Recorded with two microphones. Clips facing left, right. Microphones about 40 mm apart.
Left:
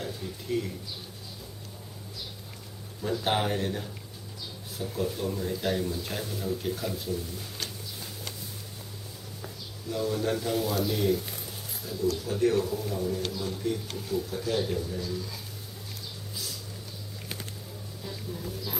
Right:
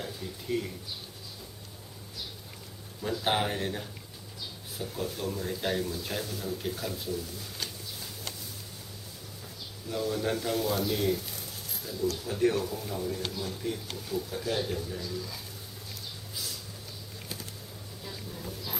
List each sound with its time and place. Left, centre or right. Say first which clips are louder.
0.0 s a sound: left 2 dB; centre
3.0 s speech: left 1 dB; centre
5.8 s speech: left 1 dB; centre
9.9 s speech: left 2 dB; centre
12.2 s speech: left 1 dB; centre
18.0 s a sound: left 3 dB; centre